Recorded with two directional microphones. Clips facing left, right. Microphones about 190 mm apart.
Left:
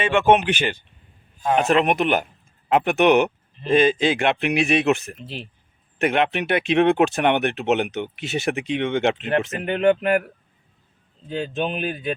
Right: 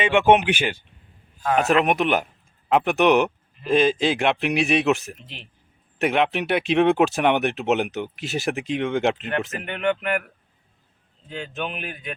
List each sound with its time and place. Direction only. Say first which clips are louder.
0.0 s speech: even; 15° right (ahead or behind)
5.2 s speech: left 9 dB; 35° left (ahead or behind)
6.0 s speech: left 1 dB; centre (ahead or behind)
9.6 s speech: left 7 dB; 35° left (ahead or behind)
11.3 s speech: left 6 dB; 35° left (ahead or behind)